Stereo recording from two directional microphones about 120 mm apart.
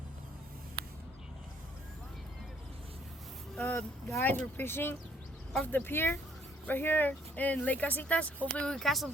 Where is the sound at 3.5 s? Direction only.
15° left (ahead or behind).